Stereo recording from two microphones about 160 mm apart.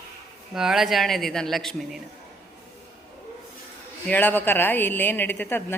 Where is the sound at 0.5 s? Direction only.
5° right (ahead or behind).